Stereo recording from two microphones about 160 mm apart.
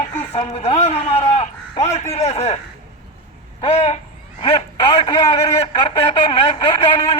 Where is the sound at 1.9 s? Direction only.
45° left (ahead or behind).